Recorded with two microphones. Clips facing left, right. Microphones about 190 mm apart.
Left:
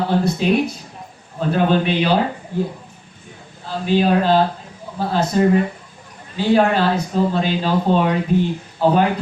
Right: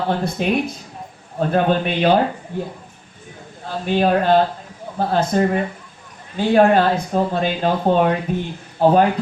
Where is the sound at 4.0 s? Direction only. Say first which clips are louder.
Right 1 dB; 55° right (ahead or behind).